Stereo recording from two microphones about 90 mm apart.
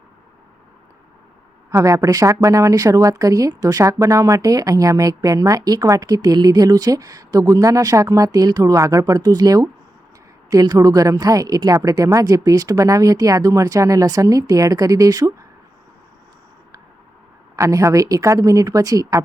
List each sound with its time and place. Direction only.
1.7 s speech: 35° right (ahead or behind)
17.6 s speech: 35° right (ahead or behind)